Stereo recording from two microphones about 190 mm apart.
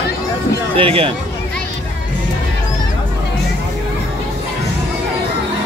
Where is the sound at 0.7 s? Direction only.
30° right (ahead or behind).